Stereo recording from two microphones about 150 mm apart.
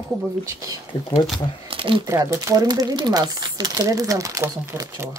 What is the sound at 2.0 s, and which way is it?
Speech, 20° right (ahead or behind).